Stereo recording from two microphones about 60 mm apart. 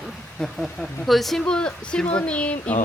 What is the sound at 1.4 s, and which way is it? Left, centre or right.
Speech, centre.